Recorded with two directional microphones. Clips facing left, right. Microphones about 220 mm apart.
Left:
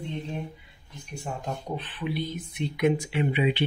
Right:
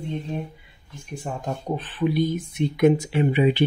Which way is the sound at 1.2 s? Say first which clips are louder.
Right 4 dB; 45° right (ahead or behind).